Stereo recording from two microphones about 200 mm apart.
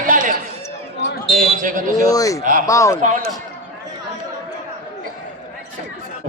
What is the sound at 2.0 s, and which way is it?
Speech, 15° left (ahead or behind).